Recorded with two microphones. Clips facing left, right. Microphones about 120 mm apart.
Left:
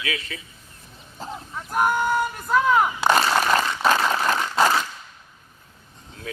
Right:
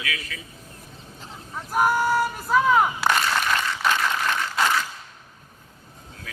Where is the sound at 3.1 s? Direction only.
35° left (ahead or behind).